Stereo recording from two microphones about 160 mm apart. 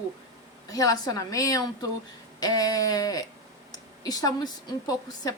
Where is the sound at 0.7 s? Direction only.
25° left (ahead or behind).